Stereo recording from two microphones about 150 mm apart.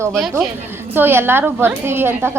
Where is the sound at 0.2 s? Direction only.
5° right (ahead or behind).